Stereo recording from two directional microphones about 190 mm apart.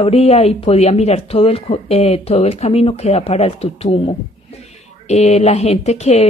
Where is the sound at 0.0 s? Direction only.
30° left (ahead or behind).